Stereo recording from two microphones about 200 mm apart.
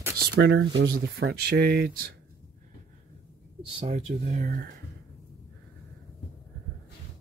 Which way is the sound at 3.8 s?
35° right (ahead or behind).